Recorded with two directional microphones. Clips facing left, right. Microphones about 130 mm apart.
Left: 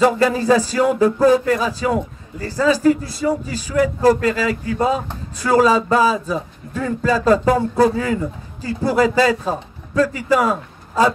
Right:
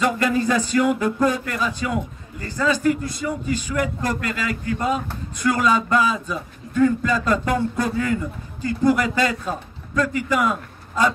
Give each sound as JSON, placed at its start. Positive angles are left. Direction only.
{"t": 0.0, "sound": "a man's voice", "side_deg": 35}